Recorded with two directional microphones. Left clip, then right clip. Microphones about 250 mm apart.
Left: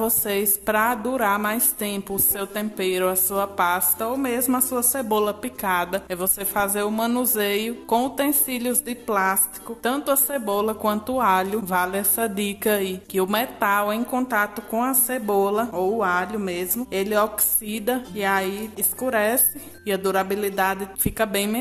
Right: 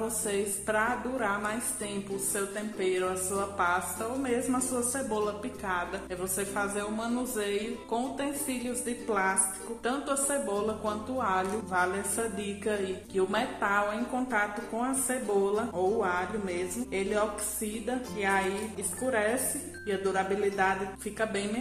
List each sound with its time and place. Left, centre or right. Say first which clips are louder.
0.2 s a woman's voice: left 7 dB; left